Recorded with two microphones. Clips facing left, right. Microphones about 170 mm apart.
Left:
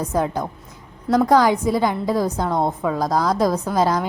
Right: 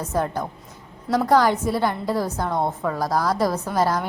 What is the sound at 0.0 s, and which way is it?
A woman's voice, 15° left (ahead or behind).